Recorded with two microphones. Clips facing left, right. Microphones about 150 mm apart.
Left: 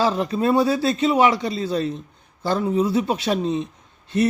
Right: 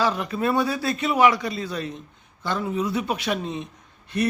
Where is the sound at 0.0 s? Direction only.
30° left (ahead or behind).